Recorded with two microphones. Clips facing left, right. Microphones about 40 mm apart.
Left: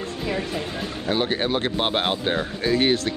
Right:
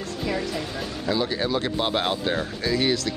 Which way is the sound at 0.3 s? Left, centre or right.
Left.